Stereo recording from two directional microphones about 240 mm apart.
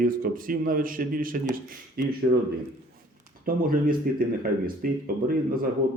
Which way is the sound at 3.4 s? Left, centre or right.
Right.